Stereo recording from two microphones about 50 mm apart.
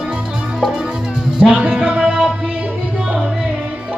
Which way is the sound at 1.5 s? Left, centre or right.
Right.